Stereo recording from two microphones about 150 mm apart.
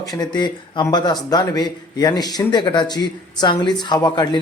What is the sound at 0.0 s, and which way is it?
Speech, 25° left (ahead or behind).